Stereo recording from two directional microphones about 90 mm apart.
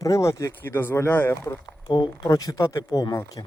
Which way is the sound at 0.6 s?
25° left (ahead or behind).